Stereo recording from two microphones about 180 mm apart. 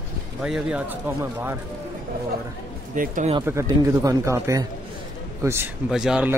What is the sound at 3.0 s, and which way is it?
Speech, 45° right (ahead or behind).